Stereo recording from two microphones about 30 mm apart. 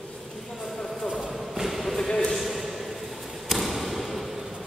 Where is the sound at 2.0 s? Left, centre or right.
Centre.